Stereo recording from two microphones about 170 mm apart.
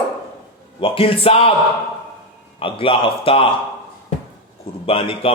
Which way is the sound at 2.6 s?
35° left (ahead or behind).